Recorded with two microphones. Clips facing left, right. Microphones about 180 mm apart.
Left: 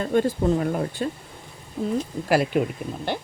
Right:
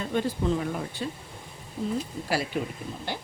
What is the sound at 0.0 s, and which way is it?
Speech, 50° left (ahead or behind).